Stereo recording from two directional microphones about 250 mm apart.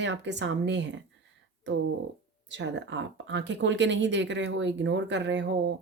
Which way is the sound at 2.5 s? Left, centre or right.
Right.